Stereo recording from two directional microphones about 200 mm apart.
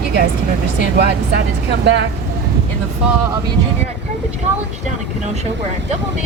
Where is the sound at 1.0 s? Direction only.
60° right (ahead or behind).